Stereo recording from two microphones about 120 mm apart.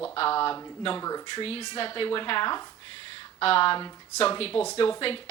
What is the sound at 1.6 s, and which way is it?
Speech, 40° left (ahead or behind).